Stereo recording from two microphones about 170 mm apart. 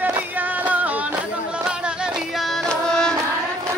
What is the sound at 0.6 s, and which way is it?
Music, 10° right (ahead or behind).